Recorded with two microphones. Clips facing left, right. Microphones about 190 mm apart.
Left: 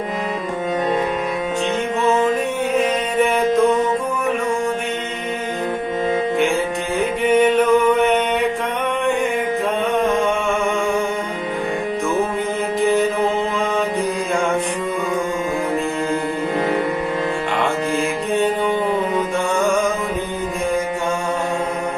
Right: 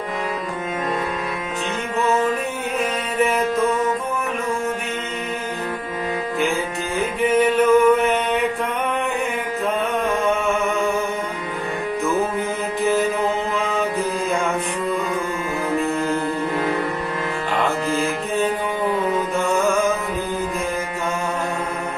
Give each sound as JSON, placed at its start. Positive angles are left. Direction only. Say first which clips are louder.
{"t": 7.0, "sound": "music", "louder": "left 2 dB", "side_deg": 0}
{"t": 12.8, "sound": "music", "louder": "left 2 dB", "side_deg": 0}
{"t": 16.6, "sound": "music", "louder": "left 4 dB", "side_deg": 25}